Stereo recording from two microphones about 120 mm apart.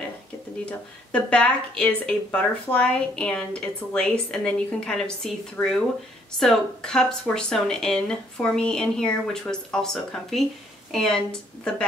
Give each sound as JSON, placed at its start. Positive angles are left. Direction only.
{"t": 0.7, "sound": "speech", "side_deg": 10}